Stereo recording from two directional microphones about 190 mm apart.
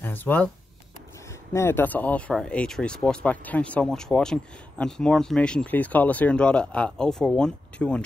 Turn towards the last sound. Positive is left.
turn(degrees=5)  # may be behind; listen again after turning